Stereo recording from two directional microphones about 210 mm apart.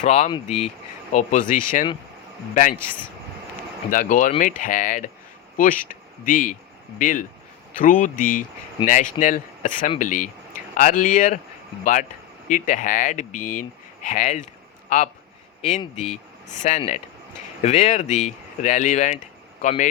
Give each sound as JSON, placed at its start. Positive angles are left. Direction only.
{"t": 0.0, "sound": "speech", "side_deg": 30}
{"t": 3.8, "sound": "speech", "side_deg": 40}
{"t": 12.5, "sound": "speech", "side_deg": 35}
{"t": 16.6, "sound": "speech", "side_deg": 35}